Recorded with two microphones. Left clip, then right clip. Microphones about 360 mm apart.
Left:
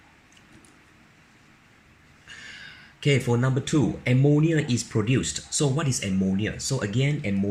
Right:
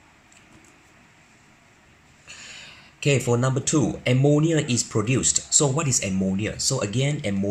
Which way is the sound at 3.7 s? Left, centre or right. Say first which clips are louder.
Even; right.